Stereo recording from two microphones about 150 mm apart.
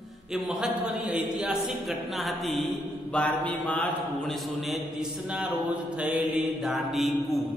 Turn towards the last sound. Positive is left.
turn(degrees=0)  # may be behind; listen again after turning